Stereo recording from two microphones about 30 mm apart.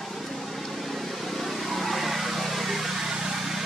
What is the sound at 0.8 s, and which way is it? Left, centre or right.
Vehicle, centre.